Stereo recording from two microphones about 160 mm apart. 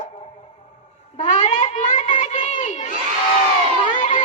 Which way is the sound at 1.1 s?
45° left (ahead or behind).